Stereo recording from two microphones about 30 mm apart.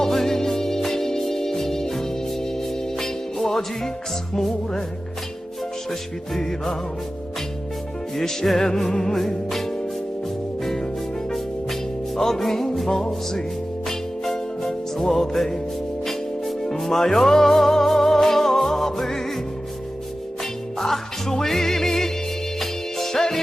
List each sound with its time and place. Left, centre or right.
0.0 s music: centre
8.1 s music: centre
9.1 s music: centre
16.6 s music: left
16.8 s music: centre
20.4 s music: centre